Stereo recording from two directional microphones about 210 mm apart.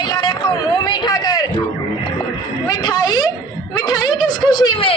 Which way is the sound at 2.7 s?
20° left (ahead or behind).